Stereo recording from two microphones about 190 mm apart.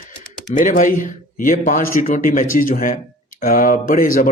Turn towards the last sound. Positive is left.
turn(degrees=45)  # may be behind; listen again after turning